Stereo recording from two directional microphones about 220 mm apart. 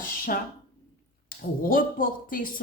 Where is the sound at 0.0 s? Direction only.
40° left (ahead or behind).